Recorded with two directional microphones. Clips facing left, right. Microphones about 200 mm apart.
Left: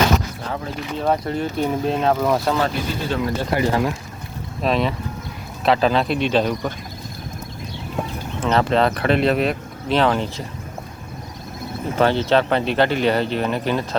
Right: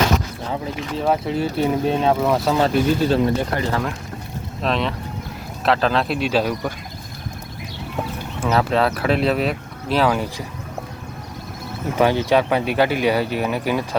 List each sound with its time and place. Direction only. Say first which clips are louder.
0.6 s speech: even; 5° right (ahead or behind)
2.6 s speech: right 5 dB; 30° right (ahead or behind)
3.5 s speech: left 3 dB; 15° left (ahead or behind)
4.6 s speech: left 2 dB; 5° left (ahead or behind)
8.4 s speech: left 1 dB; 5° right (ahead or behind)
11.9 s speech: even; 10° right (ahead or behind)